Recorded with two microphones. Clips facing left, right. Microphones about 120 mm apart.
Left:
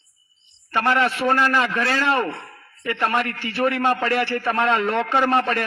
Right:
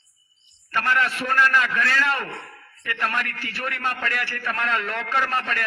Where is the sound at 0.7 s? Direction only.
35° left (ahead or behind).